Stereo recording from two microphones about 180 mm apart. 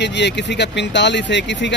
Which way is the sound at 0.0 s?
75° left (ahead or behind).